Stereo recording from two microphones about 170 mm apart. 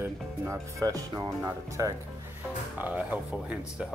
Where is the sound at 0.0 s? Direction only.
15° right (ahead or behind).